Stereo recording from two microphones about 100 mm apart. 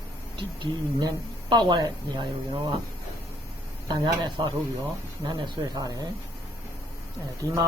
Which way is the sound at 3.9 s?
50° right (ahead or behind).